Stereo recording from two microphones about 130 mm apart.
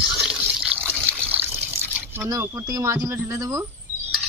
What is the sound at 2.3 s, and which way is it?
Speech, 25° right (ahead or behind).